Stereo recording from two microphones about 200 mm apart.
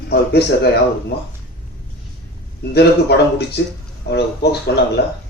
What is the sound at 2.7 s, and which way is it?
A man's voice, 55° left (ahead or behind).